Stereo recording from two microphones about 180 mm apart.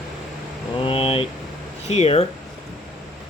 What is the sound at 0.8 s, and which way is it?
Vehicle, 30° left (ahead or behind).